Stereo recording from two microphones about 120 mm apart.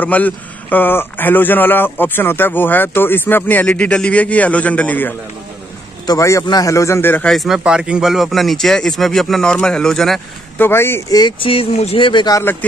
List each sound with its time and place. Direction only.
0.0 s a man's voice: 15° left (ahead or behind)
6.0 s a man's voice: 25° left (ahead or behind)
7.2 s speech: centre (ahead or behind)
10.6 s a man's voice: 20° left (ahead or behind)
11.1 s speech: 40° left (ahead or behind)